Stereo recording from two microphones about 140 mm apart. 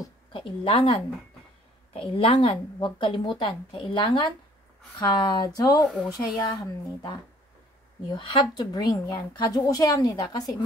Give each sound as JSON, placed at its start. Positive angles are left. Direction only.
{"t": 0.3, "sound": "a woman's voice", "side_deg": 35}
{"t": 8.1, "sound": "a woman's voice", "side_deg": 35}